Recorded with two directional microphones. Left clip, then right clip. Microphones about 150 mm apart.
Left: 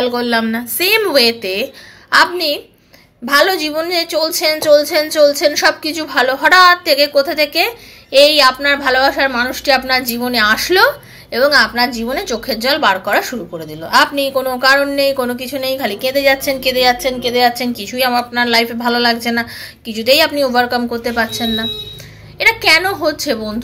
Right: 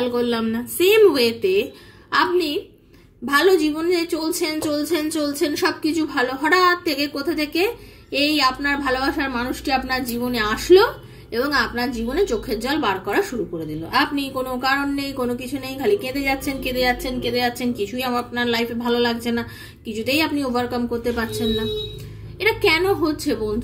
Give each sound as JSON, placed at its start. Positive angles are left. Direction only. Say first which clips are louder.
{"t": 0.0, "sound": "a woman's voice", "louder": "left 6 dB", "side_deg": -10}